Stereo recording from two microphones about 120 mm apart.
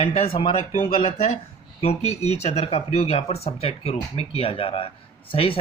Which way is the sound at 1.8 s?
60° left (ahead or behind).